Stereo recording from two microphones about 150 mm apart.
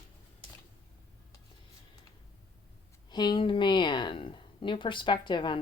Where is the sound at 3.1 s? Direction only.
30° left (ahead or behind).